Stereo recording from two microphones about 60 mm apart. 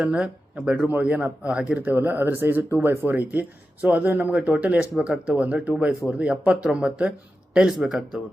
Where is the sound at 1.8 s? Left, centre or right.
Right.